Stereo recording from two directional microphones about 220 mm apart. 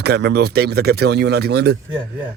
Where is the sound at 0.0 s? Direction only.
50° right (ahead or behind).